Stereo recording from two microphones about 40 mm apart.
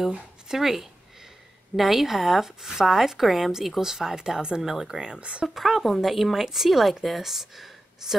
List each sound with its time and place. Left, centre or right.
0.5 s a woman's voice: centre; by 4.6 s right
4.6 s speech: centre
4.8 s speech: centre
5.5 s a woman's voice: centre